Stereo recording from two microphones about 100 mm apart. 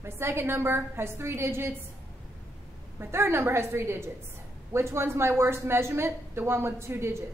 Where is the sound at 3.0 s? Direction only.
25° right (ahead or behind).